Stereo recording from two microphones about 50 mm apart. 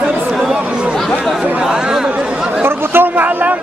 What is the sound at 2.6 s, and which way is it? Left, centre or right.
Chatter, right.